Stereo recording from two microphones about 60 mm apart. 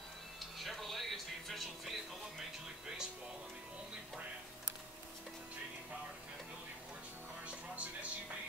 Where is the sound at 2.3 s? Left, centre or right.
Centre.